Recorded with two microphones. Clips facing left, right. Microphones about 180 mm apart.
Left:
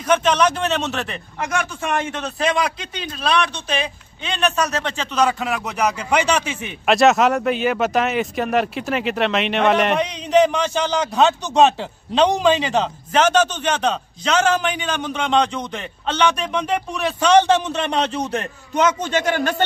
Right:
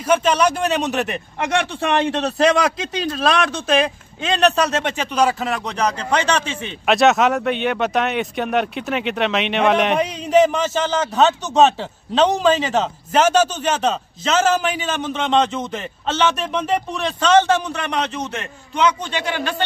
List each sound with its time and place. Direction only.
0.0 s speech: 10° right (ahead or behind)
1.4 s a man's voice: 30° right (ahead or behind)
5.1 s speech: 10° right (ahead or behind)
5.5 s speech: 5° left (ahead or behind)
6.9 s speech: centre (ahead or behind)
17.2 s a man's voice: 15° left (ahead or behind); by 18.2 s 30° left (ahead or behind)
18.3 s a man's voice: 45° left (ahead or behind)